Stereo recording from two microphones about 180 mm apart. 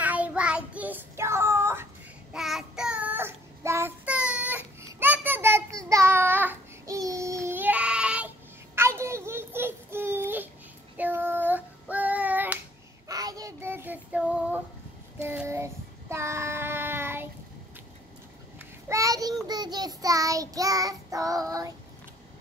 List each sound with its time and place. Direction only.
0.0 s child singing: 10° right (ahead or behind)
2.3 s child singing: centre (ahead or behind)
8.7 s a sound: 15° right (ahead or behind)
11.0 s child singing: 10° right (ahead or behind)
18.6 s a sound: 15° right (ahead or behind)
19.4 s child singing: 25° right (ahead or behind)